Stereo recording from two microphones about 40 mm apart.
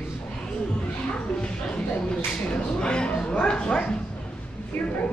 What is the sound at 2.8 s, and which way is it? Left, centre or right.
Bow-wow, left.